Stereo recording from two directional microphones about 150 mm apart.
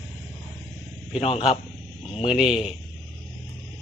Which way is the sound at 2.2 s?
5° right (ahead or behind).